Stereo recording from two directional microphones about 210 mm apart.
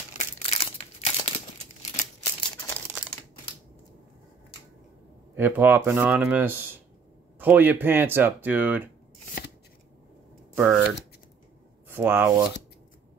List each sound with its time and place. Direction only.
0.2 s crumpling: 30° left (ahead or behind)
5.3 s speech: 10° right (ahead or behind)
10.5 s speech: 5° right (ahead or behind)
11.9 s speech: 10° right (ahead or behind)